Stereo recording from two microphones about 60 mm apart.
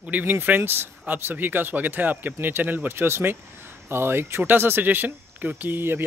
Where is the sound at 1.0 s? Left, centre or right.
Right.